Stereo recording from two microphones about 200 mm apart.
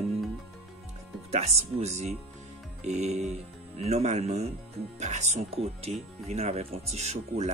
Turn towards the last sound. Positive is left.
turn(degrees=-35)  # may be behind; listen again after turning